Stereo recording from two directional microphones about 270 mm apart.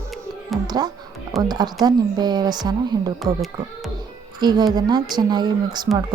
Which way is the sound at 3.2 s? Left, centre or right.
Centre.